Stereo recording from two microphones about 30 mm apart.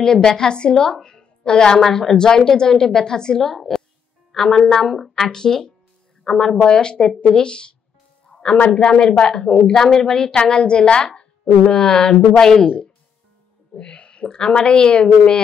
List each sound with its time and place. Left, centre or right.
0.0 s a woman's voice: left
1.8 s a woman's voice: centre
3.4 s a woman's voice: centre; by 7.7 s left
8.7 s a woman's voice: left
9.7 s a woman's voice: centre
13.7 s owl: left
14.3 s a woman's voice: left